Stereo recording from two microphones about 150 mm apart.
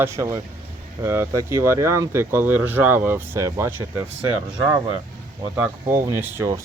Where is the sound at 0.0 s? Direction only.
20° right (ahead or behind).